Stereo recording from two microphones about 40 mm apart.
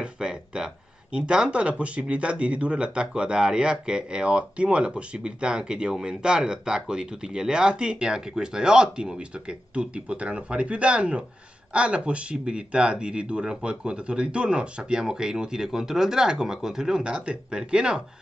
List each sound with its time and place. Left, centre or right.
0.0 s speech: right